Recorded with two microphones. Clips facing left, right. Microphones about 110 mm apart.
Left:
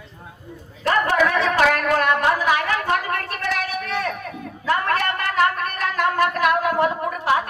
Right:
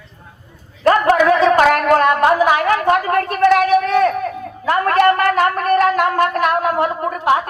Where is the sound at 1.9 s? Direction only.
40° right (ahead or behind).